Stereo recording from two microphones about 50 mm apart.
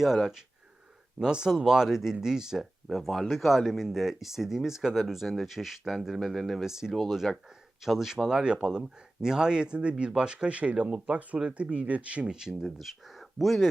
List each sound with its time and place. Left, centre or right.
1.2 s speech: centre
6.7 s speech: centre; by 12.3 s right
12.3 s speech: centre